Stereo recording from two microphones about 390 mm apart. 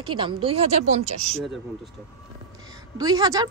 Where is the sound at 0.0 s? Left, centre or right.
Centre.